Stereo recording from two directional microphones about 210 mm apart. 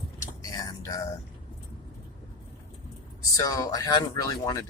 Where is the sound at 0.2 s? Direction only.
15° left (ahead or behind).